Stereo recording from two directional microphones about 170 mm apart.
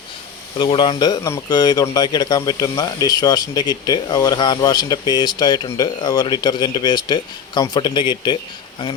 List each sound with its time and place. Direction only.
0.6 s speech: 30° left (ahead or behind)